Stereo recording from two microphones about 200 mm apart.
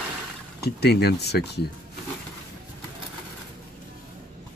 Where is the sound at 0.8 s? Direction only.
55° left (ahead or behind).